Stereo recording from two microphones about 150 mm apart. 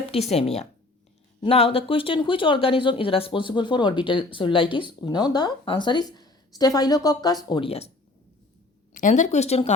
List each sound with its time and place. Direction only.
0.1 s speech: 45° left (ahead or behind); by 7.3 s 25° left (ahead or behind)
7.5 s speech: 40° left (ahead or behind)
8.9 s speech: 55° left (ahead or behind)